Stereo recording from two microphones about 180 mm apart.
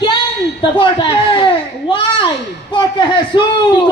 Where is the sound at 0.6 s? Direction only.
25° left (ahead or behind).